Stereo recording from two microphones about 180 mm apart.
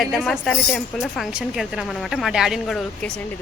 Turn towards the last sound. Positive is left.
turn(degrees=5)  # may be behind; listen again after turning